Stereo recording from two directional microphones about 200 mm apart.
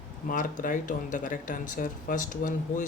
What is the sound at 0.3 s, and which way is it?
Speech, 40° left (ahead or behind).